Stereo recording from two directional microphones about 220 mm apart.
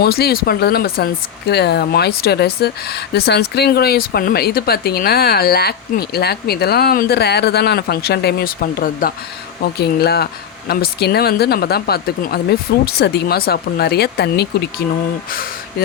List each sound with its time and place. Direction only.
0.0 s speech: 45° left (ahead or behind)